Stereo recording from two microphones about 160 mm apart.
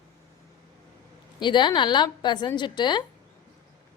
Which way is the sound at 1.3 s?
30° left (ahead or behind).